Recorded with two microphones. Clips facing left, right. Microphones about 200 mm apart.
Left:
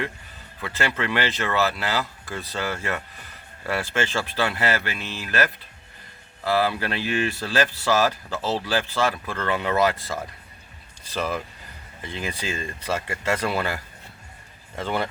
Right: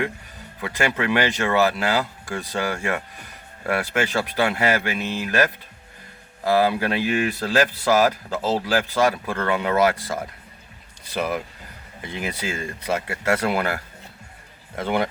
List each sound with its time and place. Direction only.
0.6 s speech: 15° right (ahead or behind)
14.8 s speech: 15° right (ahead or behind)